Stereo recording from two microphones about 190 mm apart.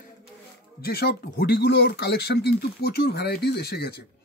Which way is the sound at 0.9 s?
55° left (ahead or behind).